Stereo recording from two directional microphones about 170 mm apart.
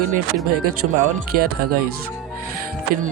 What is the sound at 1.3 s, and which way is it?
Speech, 60° right (ahead or behind).